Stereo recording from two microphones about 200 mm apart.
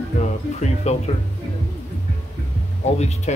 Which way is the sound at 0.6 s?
35° left (ahead or behind).